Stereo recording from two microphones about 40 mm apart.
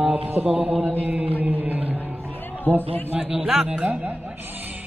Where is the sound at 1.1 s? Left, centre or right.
Right.